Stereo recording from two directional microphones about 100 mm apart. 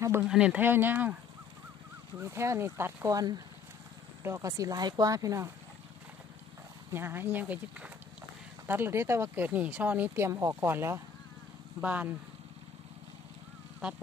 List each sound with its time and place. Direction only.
0.3 s speech: 10° right (ahead or behind)
2.1 s speech: 25° right (ahead or behind)
4.2 s speech: 30° right (ahead or behind)
6.9 s speech: 25° right (ahead or behind)